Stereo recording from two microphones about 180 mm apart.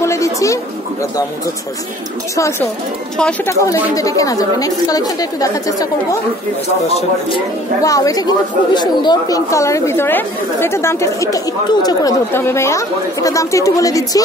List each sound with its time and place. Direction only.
0.0 s speech: 15° left (ahead or behind)
3.2 s speech: 5° left (ahead or behind)
3.6 s a woman's voice: 20° left (ahead or behind)
6.9 s speech: 30° left (ahead or behind)